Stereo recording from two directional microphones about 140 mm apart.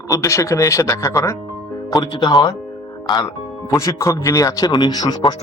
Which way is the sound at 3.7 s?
20° left (ahead or behind).